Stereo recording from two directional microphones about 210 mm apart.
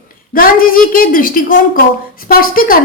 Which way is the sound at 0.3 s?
40° left (ahead or behind).